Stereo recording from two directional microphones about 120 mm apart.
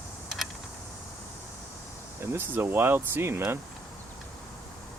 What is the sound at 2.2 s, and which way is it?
Speech, 20° right (ahead or behind).